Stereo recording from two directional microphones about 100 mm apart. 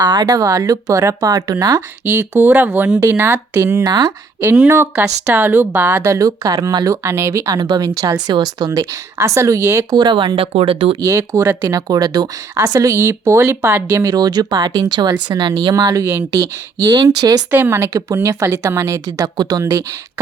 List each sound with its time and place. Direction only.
0.0 s speech: 40° right (ahead or behind)
2.0 s a woman's voice: 20° right (ahead or behind)
3.0 s a woman's voice: 25° right (ahead or behind)
3.8 s speech: 40° right (ahead or behind)
4.4 s speech: 10° right (ahead or behind)
4.7 s a woman's voice: 30° right (ahead or behind)
6.0 s speech: 35° right (ahead or behind)
9.9 s speech: 50° right (ahead or behind); by 10.9 s 70° right (ahead or behind)
11.0 s a woman's voice: 30° right (ahead or behind)
14.0 s speech: 40° right (ahead or behind)
15.7 s a woman's voice: 40° right (ahead or behind)
17.5 s a woman's voice: 20° right (ahead or behind)
19.0 s speech: 40° right (ahead or behind)